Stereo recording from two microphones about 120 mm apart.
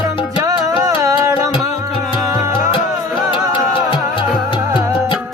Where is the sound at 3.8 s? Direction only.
40° left (ahead or behind).